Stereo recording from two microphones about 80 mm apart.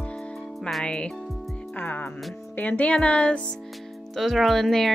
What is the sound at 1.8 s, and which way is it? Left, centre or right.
Music, left.